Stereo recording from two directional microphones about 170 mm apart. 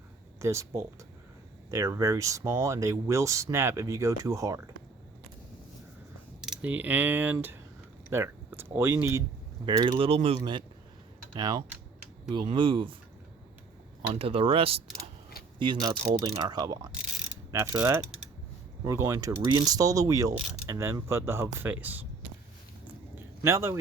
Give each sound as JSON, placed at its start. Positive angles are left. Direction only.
{"t": 0.3, "sound": "speech", "side_deg": -15}
{"t": 6.4, "sound": "speech", "side_deg": -5}
{"t": 9.6, "sound": "speech", "side_deg": -25}
{"t": 14.1, "sound": "speech", "side_deg": -35}
{"t": 17.5, "sound": "mechanisms", "side_deg": -15}
{"t": 18.9, "sound": "speech", "side_deg": -20}
{"t": 23.1, "sound": "a sound", "side_deg": -15}